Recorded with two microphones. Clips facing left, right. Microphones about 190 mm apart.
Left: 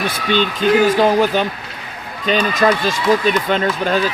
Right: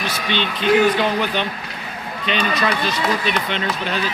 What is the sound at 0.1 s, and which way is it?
Speech, 45° left (ahead or behind).